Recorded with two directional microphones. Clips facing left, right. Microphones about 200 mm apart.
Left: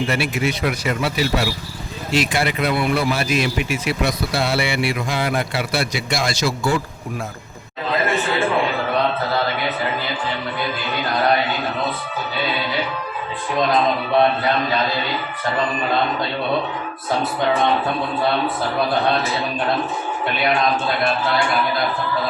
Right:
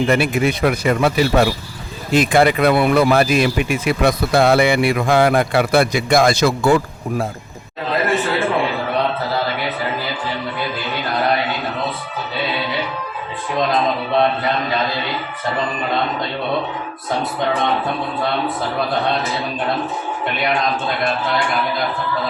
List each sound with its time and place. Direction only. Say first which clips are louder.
0.1 s speech: right 5 dB; 50° right (ahead or behind)